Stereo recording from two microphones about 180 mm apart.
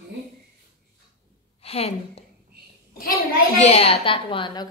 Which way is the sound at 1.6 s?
35° left (ahead or behind).